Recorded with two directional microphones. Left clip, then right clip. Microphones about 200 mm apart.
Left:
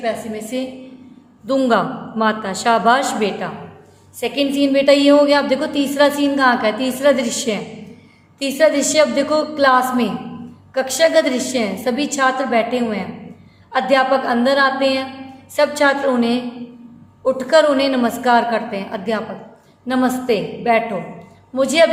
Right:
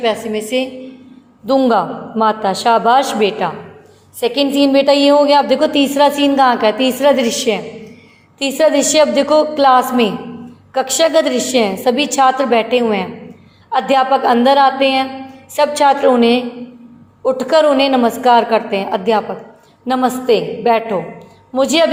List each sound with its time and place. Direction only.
0.0 s a woman's voice: 30° right (ahead or behind)
1.5 s a woman's voice: 10° right (ahead or behind)